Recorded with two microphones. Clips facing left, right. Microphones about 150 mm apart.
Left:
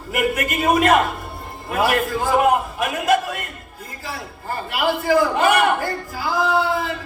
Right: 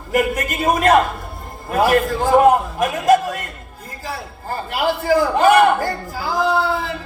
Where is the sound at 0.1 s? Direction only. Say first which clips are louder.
Right 2 dB; 40° right (ahead or behind).